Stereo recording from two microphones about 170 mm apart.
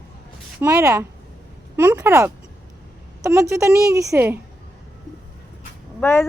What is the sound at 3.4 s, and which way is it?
Speech, 15° right (ahead or behind).